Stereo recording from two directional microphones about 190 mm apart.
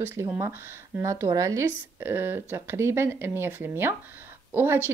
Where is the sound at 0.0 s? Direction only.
15° right (ahead or behind).